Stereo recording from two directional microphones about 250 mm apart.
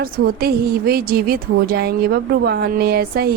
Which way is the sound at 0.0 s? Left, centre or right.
Right.